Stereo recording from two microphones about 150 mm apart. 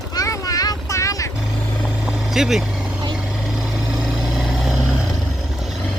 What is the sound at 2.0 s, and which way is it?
Vehicle, centre (ahead or behind).